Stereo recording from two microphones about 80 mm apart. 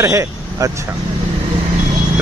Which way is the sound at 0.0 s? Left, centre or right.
Right.